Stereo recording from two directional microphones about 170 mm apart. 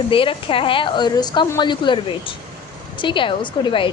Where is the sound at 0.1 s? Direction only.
30° left (ahead or behind).